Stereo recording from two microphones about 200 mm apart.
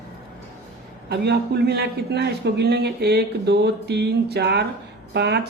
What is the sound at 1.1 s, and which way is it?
A man's voice, 55° right (ahead or behind).